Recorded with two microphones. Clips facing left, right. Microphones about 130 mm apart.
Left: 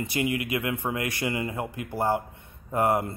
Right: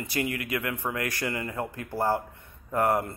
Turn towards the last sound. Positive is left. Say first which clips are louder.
# left 1 dB
turn(degrees=20)  # may be behind; listen again after turning